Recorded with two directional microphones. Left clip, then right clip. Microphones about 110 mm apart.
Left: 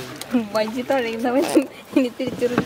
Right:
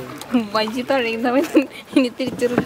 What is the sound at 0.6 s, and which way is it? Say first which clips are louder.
Speech: right 2 dB; 45° right (ahead or behind).